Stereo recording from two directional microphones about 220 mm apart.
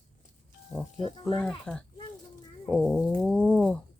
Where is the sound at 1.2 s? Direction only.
Centre (ahead or behind).